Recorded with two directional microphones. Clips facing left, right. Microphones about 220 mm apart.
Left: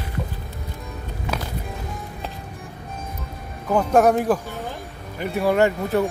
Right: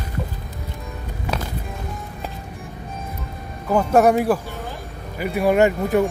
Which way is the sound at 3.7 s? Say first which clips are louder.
Right 1 dB; 5° right (ahead or behind).